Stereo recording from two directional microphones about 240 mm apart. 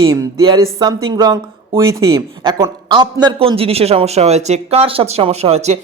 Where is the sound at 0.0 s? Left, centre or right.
Centre.